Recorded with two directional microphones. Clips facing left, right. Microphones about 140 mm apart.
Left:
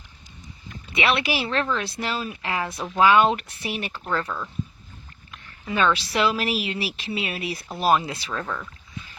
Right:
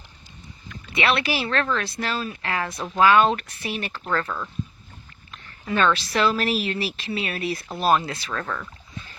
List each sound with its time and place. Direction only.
0.9 s speech: 20° left (ahead or behind)
5.3 s speech: 10° left (ahead or behind)